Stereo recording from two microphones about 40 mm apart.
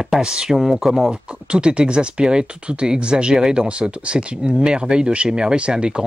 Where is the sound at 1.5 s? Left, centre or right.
Right.